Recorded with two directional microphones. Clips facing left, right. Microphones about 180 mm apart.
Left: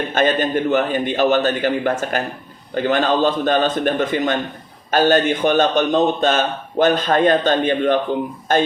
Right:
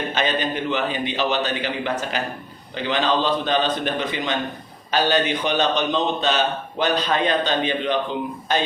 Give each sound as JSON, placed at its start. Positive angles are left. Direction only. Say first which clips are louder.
{"t": 0.1, "sound": "a man's voice", "louder": "left 8 dB", "side_deg": 50}